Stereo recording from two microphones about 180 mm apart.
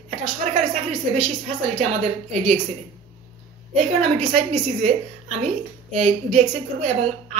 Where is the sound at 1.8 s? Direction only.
40° right (ahead or behind).